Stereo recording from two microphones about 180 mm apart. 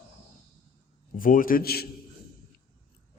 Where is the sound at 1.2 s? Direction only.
50° left (ahead or behind).